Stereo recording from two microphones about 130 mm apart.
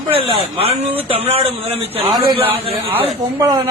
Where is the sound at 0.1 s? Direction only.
45° right (ahead or behind).